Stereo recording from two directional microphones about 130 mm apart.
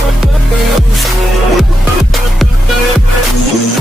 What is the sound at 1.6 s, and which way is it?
Music, centre (ahead or behind).